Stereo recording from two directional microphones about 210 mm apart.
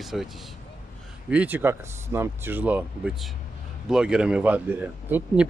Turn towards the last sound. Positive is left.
turn(degrees=-5)  # may be behind; listen again after turning